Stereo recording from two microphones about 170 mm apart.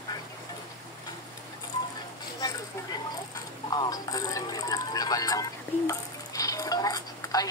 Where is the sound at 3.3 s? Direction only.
25° left (ahead or behind).